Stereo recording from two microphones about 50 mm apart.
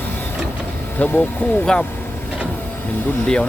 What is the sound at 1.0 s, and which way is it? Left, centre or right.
Speech, left.